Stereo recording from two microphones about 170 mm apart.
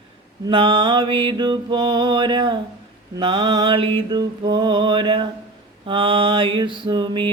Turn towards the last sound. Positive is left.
turn(degrees=-25)  # may be behind; listen again after turning